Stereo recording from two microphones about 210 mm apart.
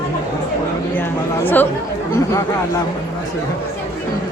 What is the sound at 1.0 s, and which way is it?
Speech, 10° left (ahead or behind).